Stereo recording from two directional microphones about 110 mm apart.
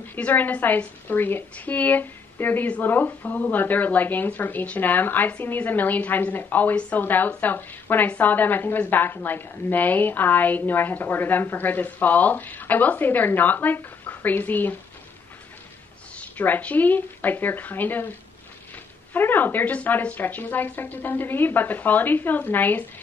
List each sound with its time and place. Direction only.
0.1 s a woman's voice: 15° left (ahead or behind)
16.2 s a woman's voice: 15° left (ahead or behind)
19.1 s a woman's voice: 15° left (ahead or behind)